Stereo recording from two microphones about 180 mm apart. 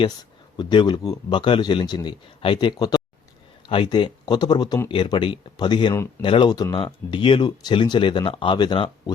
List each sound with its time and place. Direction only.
0.0 s speech: 25° left (ahead or behind)